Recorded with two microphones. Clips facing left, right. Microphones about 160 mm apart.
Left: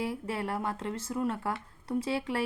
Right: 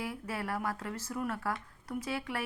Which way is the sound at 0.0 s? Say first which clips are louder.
Left 4 dB; 25° left (ahead or behind).